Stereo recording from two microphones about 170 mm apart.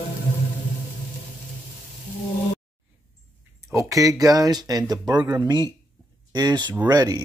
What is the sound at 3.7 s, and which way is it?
A man's voice, 20° right (ahead or behind).